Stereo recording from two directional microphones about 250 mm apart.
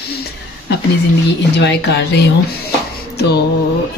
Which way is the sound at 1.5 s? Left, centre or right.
Left.